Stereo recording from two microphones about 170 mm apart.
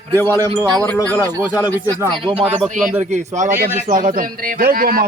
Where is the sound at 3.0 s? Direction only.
45° right (ahead or behind).